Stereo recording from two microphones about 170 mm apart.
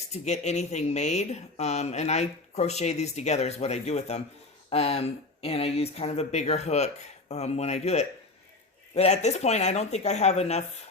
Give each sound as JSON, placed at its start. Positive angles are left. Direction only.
{"t": 0.1, "sound": "speech", "side_deg": 40}